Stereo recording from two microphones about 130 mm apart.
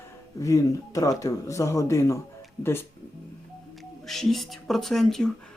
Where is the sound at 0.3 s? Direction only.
25° left (ahead or behind).